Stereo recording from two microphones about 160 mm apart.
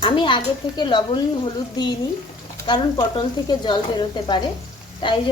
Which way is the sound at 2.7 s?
30° left (ahead or behind).